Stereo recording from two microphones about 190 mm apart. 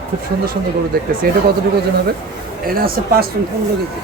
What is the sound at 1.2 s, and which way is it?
Speech, 55° right (ahead or behind).